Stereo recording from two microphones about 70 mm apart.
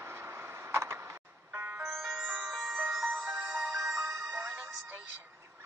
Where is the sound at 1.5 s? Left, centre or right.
Right.